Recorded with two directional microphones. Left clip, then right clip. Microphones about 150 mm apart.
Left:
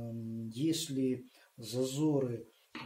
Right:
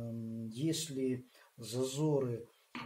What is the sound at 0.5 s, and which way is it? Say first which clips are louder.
Speech: left 3 dB; 65° left (ahead or behind).